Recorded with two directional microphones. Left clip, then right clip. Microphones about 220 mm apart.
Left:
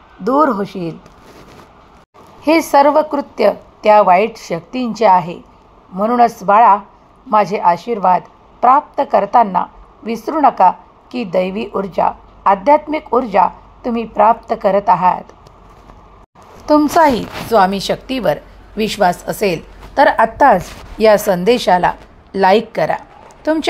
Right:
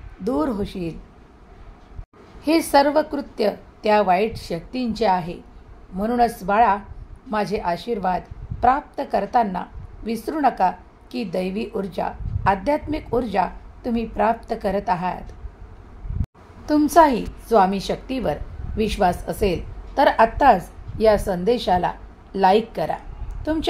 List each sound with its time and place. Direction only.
0.2 s a woman's voice: 10° left (ahead or behind)
2.4 s a woman's voice: 10° left (ahead or behind)
16.6 s a woman's voice: 15° left (ahead or behind)